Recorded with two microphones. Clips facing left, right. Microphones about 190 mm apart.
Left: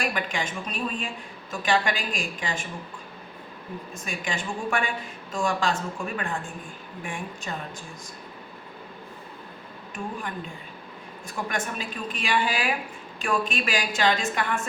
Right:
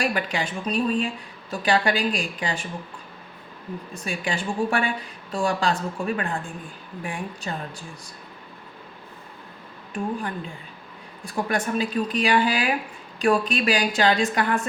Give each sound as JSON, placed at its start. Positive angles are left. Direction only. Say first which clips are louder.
{"t": 0.0, "sound": "a woman's voice", "louder": "right 3 dB", "side_deg": -35}
{"t": 3.9, "sound": "a woman's voice", "louder": "right 4 dB", "side_deg": -35}
{"t": 7.0, "sound": "a woman's voice", "louder": "right 3 dB", "side_deg": -35}
{"t": 9.9, "sound": "a woman's voice", "louder": "right 5 dB", "side_deg": -35}